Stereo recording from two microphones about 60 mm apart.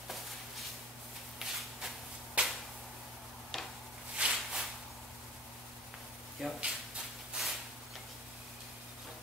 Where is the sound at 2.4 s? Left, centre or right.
Centre.